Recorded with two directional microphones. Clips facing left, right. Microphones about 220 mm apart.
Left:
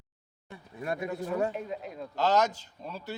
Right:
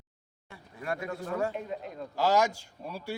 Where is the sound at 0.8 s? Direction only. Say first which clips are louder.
Left 2 dB; 20° left (ahead or behind).